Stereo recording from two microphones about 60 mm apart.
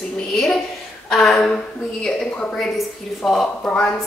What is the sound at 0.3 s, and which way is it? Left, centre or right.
A woman's voice, centre.